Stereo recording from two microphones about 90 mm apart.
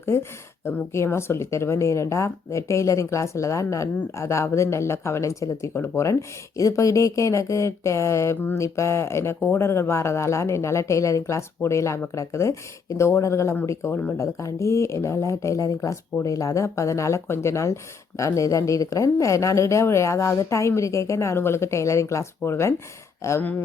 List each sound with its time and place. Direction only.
0.0 s speech: 30° left (ahead or behind)